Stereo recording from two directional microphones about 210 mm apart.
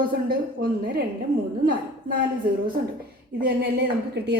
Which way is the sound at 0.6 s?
50° right (ahead or behind).